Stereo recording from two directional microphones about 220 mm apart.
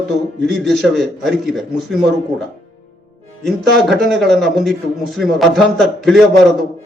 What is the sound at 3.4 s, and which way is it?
A man's voice, centre (ahead or behind).